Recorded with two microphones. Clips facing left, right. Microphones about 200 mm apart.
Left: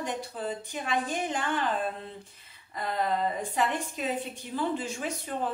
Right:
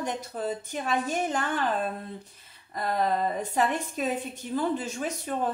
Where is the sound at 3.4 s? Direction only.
45° right (ahead or behind).